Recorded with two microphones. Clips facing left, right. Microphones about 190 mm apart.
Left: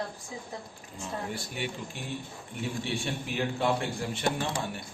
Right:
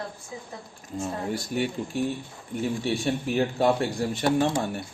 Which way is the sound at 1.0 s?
40° right (ahead or behind).